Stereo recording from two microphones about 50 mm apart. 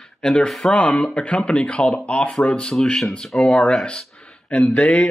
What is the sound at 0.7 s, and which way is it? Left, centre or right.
Speech, centre.